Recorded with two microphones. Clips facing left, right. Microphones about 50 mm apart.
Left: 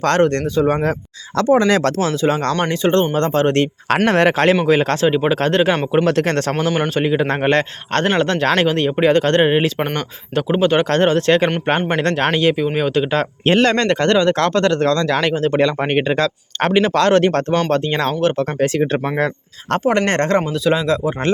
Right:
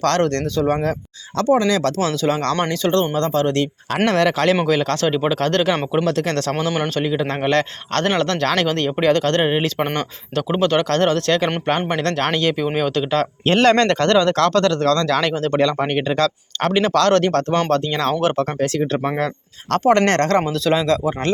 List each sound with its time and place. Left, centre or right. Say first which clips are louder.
0.0 s a man's voice: left 3 dB; left
1.5 s speech: left 4 dB; left
2.0 s a man's voice: left 2 dB; left
5.0 s a man's voice: left 3 dB; centre
6.1 s speech: left 3 dB; left
6.6 s speech: left 3 dB; centre
7.0 s a man's voice: left 4 dB; left
13.6 s a man's voice: right 3 dB; centre; by 14.9 s left
14.9 s a man's voice: left 1 dB; centre
19.8 s speech: right 2 dB; centre